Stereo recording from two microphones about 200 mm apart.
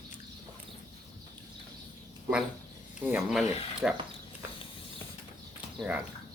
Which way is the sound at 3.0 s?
5° right (ahead or behind).